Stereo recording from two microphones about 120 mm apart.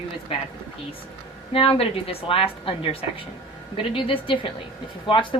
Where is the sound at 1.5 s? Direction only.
55° left (ahead or behind).